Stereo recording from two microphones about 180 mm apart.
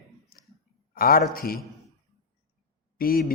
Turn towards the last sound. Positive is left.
turn(degrees=55)  # may be behind; listen again after turning